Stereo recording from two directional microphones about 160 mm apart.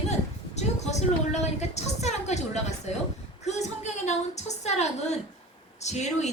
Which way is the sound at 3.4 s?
45° left (ahead or behind).